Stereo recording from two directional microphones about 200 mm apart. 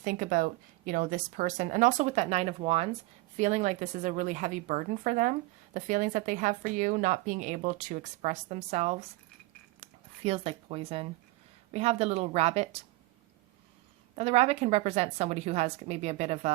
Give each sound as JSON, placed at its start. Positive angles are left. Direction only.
{"t": 0.0, "sound": "a woman's voice", "side_deg": -45}
{"t": 14.2, "sound": "a woman's voice", "side_deg": -30}